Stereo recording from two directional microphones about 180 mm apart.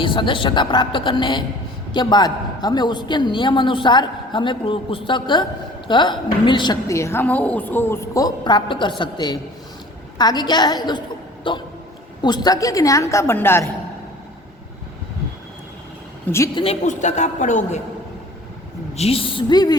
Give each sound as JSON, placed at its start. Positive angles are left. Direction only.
{"t": 0.0, "sound": "a woman's voice", "side_deg": 25}
{"t": 16.8, "sound": "a woman's voice", "side_deg": 40}
{"t": 18.9, "sound": "a woman's voice", "side_deg": 35}